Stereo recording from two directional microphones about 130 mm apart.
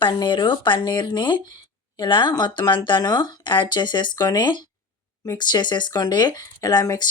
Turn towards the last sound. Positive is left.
turn(degrees=30)  # may be behind; listen again after turning